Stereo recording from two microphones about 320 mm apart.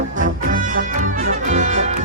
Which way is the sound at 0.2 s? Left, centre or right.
Right.